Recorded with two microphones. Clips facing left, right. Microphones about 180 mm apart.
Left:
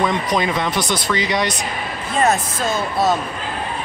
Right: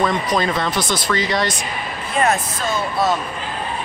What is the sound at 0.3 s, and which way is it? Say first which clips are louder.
Speech: even; 15° left (ahead or behind).